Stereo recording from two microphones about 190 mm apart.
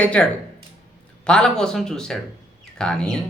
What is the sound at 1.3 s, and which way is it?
Speech, 5° left (ahead or behind).